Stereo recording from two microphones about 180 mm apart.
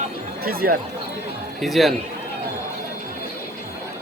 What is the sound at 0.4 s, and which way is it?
Speech, 60° right (ahead or behind).